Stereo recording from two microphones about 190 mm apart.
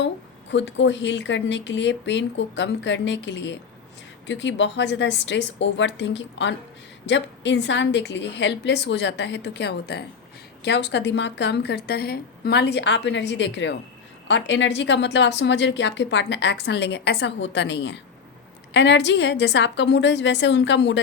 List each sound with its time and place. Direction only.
0.5 s a woman's voice: 70° left (ahead or behind)